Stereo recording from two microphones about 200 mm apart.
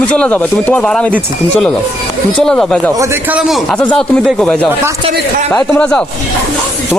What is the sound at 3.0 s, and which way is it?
Speech, 10° right (ahead or behind).